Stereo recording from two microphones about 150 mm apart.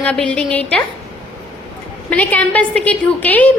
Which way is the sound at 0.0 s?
5° left (ahead or behind).